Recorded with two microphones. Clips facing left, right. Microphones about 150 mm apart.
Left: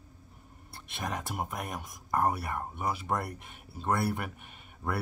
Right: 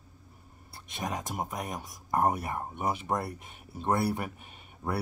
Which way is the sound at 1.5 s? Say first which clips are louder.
Right 1 dB; 15° right (ahead or behind).